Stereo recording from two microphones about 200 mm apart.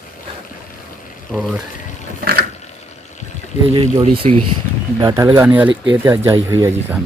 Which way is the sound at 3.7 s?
25° right (ahead or behind).